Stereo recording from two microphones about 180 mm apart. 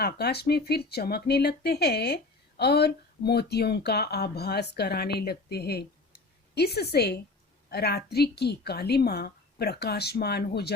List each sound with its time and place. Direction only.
0.0 s speech: 65° left (ahead or behind)